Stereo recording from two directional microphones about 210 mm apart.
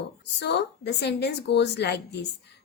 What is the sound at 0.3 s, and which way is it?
A woman's voice, 55° left (ahead or behind).